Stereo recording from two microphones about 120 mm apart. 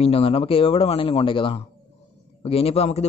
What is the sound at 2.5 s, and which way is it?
Speech, 55° left (ahead or behind).